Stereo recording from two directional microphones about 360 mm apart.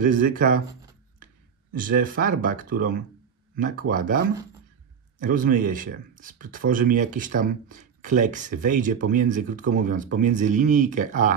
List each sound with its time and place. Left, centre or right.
0.0 s speech: right
1.8 s speech: right
5.2 s speech: right